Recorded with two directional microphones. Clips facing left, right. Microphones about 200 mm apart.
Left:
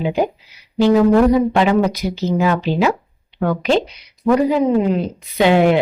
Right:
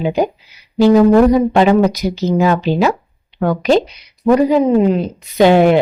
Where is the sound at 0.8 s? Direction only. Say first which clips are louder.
Right 3 dB; 40° right (ahead or behind).